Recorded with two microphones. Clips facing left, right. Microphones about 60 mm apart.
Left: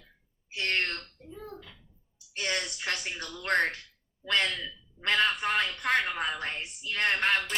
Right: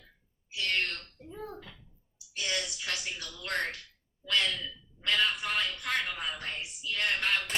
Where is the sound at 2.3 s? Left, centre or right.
Left.